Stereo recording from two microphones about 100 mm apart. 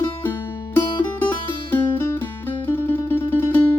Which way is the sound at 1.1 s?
20° left (ahead or behind).